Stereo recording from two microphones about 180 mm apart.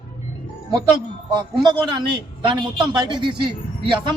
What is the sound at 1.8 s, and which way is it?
A man's voice, 25° right (ahead or behind).